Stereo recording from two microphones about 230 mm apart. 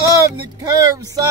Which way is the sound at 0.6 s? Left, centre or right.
Centre.